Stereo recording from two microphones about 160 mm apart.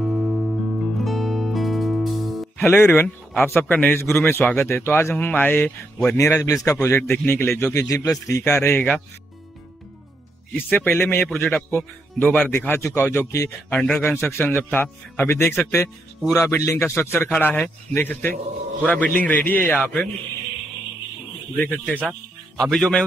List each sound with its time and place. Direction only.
0.0 s music: 5° right (ahead or behind)
2.6 s a man's voice: 15° left (ahead or behind)
10.5 s a man's voice: 10° left (ahead or behind)
13.7 s a man's voice: 5° left (ahead or behind)
19.8 s speech: centre (ahead or behind)
22.6 s speech: 5° left (ahead or behind)